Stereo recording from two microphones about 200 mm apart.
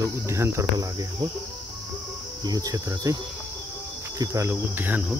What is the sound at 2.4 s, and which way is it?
Cricket, 20° right (ahead or behind).